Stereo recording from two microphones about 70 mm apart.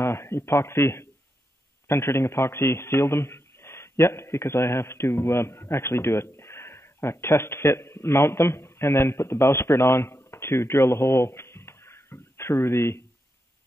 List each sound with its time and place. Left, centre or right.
0.0 s a man's voice: left